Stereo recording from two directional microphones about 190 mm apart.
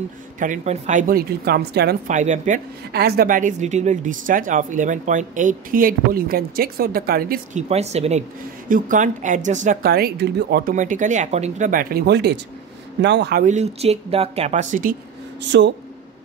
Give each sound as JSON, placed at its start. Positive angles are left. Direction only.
{"t": 0.4, "sound": "speech", "side_deg": -40}
{"t": 2.0, "sound": "speech", "side_deg": -40}
{"t": 2.9, "sound": "speech", "side_deg": -55}
{"t": 7.6, "sound": "speech", "side_deg": -35}
{"t": 8.6, "sound": "speech", "side_deg": -45}
{"t": 13.4, "sound": "speech", "side_deg": -40}
{"t": 15.4, "sound": "speech", "side_deg": -70}